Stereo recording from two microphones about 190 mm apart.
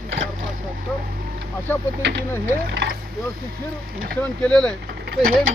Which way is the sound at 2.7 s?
60° right (ahead or behind).